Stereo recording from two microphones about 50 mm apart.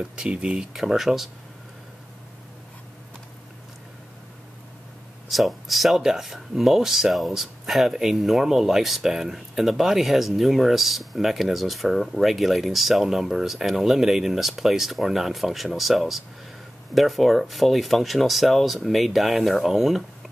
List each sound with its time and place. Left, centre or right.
0.0 s speech: right
0.6 s speech: centre
5.3 s speech: centre